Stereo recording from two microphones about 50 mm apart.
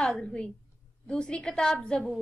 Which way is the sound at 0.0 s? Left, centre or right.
Centre.